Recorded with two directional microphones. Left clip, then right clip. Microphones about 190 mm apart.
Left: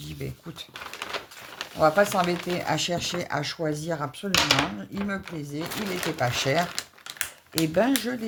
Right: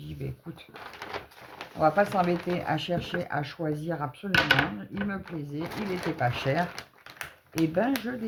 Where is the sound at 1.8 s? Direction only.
35° left (ahead or behind).